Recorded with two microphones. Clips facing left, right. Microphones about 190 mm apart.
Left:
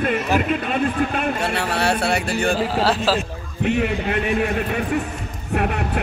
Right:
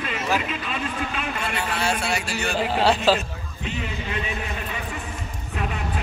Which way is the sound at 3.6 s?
65° left (ahead or behind).